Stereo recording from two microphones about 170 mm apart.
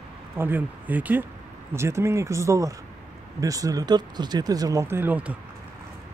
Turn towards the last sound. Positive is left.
turn(degrees=-10)  # may be behind; listen again after turning